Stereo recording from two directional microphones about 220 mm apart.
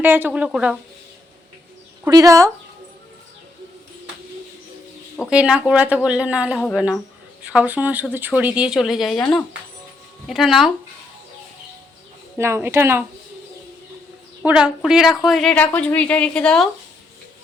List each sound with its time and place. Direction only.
0.0 s a woman's voice: 10° right (ahead or behind)
2.0 s speech: 15° right (ahead or behind)
5.3 s a woman's voice: 5° right (ahead or behind)
9.1 s speech: 20° left (ahead or behind)
10.2 s a woman's voice: centre (ahead or behind)
12.4 s speech: 10° right (ahead or behind)
14.4 s a woman's voice: 5° right (ahead or behind)